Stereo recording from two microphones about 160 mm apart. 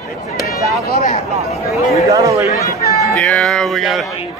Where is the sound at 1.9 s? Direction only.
20° right (ahead or behind).